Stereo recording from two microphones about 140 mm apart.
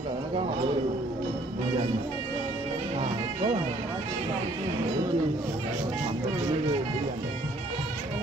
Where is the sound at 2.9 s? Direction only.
45° right (ahead or behind).